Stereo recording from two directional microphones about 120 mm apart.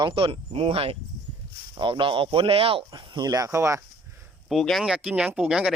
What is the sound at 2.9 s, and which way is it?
Speech, 40° right (ahead or behind).